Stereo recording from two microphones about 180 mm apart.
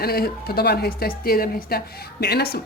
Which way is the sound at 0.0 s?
60° left (ahead or behind).